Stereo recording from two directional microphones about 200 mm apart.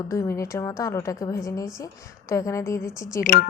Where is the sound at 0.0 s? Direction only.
15° left (ahead or behind).